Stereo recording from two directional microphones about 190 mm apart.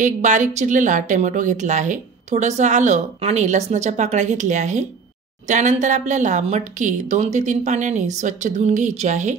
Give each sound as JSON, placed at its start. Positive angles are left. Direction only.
{"t": 0.0, "sound": "a woman's voice", "side_deg": -40}